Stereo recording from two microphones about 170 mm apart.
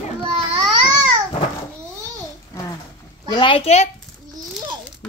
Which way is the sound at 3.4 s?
30° left (ahead or behind).